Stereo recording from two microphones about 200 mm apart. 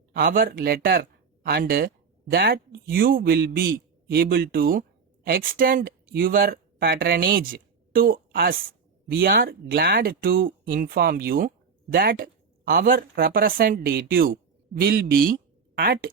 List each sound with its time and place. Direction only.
0.1 s a man's voice: 45° right (ahead or behind)